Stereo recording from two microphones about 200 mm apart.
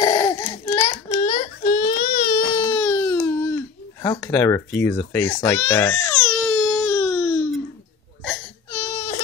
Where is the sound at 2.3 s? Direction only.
20° left (ahead or behind).